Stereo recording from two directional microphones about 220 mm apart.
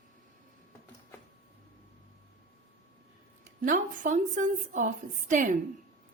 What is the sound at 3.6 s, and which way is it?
A woman's voice, 35° right (ahead or behind).